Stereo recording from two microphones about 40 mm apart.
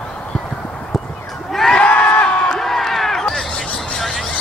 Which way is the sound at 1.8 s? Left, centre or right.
Left.